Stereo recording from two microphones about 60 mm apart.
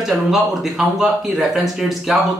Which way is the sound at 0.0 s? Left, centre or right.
Centre.